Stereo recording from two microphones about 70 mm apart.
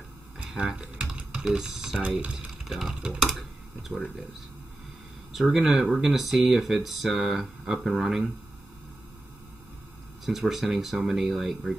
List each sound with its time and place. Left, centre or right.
0.7 s typing: centre
2.0 s speech: right
2.3 s a sound: centre
3.2 s speech: centre
5.3 s speech: centre
10.2 s speech: centre